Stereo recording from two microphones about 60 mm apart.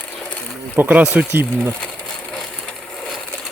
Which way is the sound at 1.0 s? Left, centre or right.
Right.